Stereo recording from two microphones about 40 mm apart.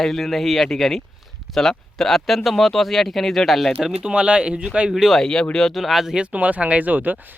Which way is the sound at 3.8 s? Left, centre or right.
Right.